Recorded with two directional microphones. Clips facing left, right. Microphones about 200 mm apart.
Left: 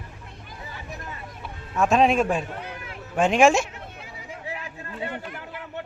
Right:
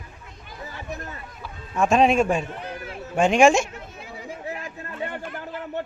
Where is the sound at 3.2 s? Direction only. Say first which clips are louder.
Right 1 dB; centre (ahead or behind).